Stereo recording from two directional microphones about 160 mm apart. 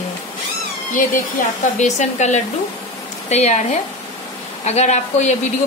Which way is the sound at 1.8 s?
50° left (ahead or behind).